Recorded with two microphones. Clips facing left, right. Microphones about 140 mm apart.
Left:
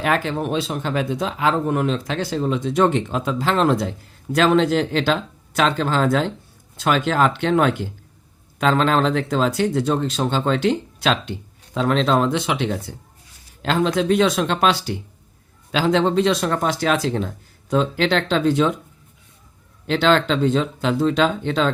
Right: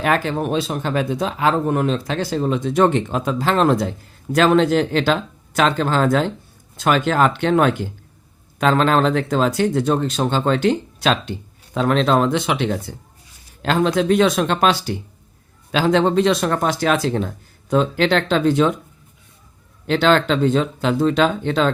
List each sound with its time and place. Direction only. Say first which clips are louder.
0.0 s speech: right 2 dB; 45° right (ahead or behind); by 12.7 s 60° right (ahead or behind)
13.6 s speech: right 2 dB; 50° right (ahead or behind)
19.9 s speech: right 1 dB; 50° right (ahead or behind)